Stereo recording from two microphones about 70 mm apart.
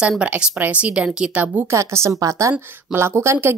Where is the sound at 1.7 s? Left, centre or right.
Right.